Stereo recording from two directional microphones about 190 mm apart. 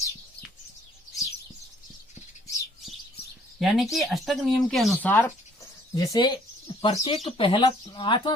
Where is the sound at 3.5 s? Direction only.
Centre (ahead or behind).